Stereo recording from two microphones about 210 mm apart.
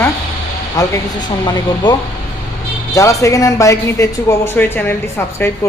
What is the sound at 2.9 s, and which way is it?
Speech, 15° left (ahead or behind).